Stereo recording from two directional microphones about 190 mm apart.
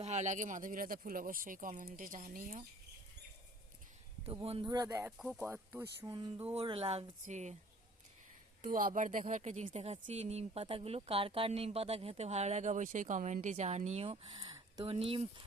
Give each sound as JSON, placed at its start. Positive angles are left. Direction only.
{"t": 0.0, "sound": "speech", "side_deg": -40}
{"t": 4.3, "sound": "speech", "side_deg": -30}
{"t": 5.1, "sound": "speech", "side_deg": 0}
{"t": 5.5, "sound": "speech", "side_deg": -10}
{"t": 6.1, "sound": "speech", "side_deg": -25}
{"t": 8.6, "sound": "speech", "side_deg": -45}